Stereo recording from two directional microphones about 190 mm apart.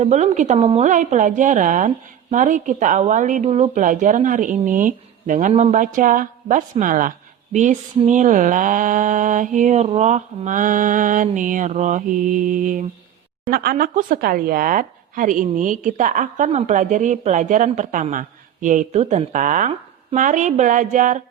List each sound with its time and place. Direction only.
0.0 s a woman's voice: 35° right (ahead or behind)